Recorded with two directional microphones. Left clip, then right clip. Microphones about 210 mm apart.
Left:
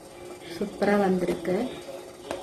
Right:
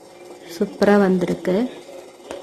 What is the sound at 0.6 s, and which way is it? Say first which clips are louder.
Speech: right 9 dB; 60° right (ahead or behind).